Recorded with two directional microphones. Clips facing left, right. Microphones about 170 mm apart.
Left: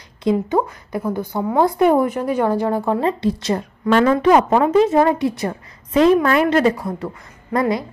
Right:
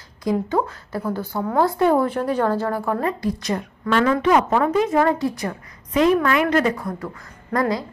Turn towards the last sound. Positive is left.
turn(degrees=20)  # may be behind; listen again after turning